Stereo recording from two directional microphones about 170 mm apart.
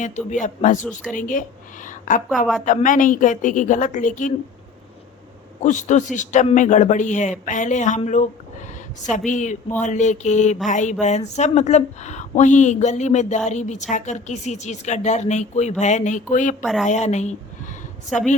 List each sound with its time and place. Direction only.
0.0 s speech: 45° left (ahead or behind)
5.6 s speech: 45° left (ahead or behind)